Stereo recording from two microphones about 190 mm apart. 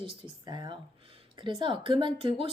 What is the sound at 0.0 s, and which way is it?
A woman's voice, 20° right (ahead or behind).